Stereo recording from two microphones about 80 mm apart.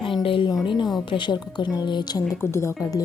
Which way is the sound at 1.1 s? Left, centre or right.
Left.